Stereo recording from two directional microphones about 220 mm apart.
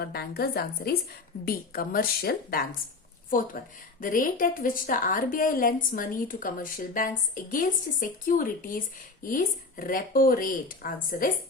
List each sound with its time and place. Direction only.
0.0 s a woman's voice: 45° left (ahead or behind)